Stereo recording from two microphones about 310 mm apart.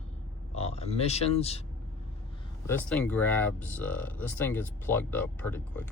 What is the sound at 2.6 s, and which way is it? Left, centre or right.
Speech, centre.